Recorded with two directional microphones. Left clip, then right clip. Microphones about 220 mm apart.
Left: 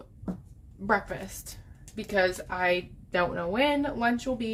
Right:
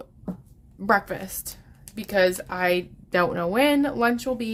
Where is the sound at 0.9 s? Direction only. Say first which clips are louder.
Right 5 dB; 45° right (ahead or behind).